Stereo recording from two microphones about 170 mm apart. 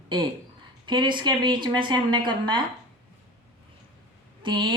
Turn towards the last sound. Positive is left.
turn(degrees=-30)  # may be behind; listen again after turning